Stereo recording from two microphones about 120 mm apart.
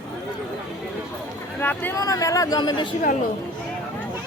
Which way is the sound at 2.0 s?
30° left (ahead or behind).